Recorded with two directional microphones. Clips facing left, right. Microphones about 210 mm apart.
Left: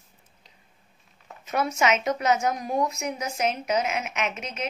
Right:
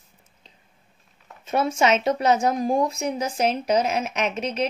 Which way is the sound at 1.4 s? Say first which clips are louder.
Right 3 dB; 30° right (ahead or behind).